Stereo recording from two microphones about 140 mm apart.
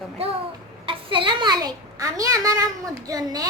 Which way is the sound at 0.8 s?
40° right (ahead or behind).